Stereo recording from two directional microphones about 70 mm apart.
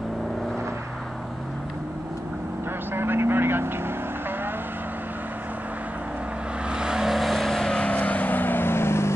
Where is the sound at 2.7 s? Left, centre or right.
Right.